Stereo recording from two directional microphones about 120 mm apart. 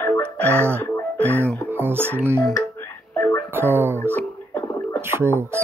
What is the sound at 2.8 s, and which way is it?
Music, 20° left (ahead or behind).